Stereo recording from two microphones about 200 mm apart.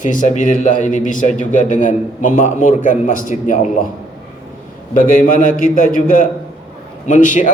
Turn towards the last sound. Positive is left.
turn(degrees=40)  # may be behind; listen again after turning